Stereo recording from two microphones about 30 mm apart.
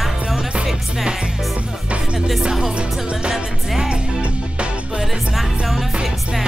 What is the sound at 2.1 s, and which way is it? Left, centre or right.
Music, centre.